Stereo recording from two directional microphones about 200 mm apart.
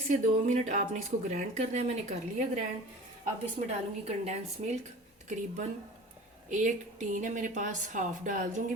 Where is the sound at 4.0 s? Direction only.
35° right (ahead or behind).